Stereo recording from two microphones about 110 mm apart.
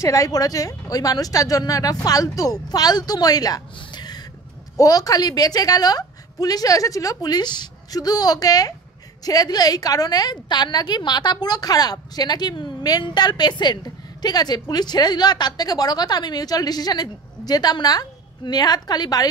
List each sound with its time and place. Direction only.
0.0 s a woman's voice: 30° left (ahead or behind)
3.7 s a sound: 40° left (ahead or behind)
4.7 s a woman's voice: 35° left (ahead or behind)